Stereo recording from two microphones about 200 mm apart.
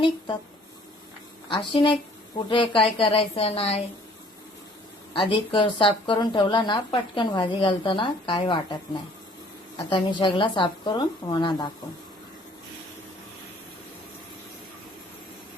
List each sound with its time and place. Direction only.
1.5 s a woman's voice: 25° left (ahead or behind)
5.1 s a woman's voice: 25° left (ahead or behind)